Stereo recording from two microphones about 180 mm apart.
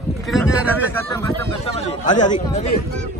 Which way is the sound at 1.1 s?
15° left (ahead or behind).